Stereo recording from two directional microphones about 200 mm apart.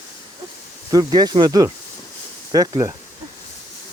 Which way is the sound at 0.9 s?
20° right (ahead or behind).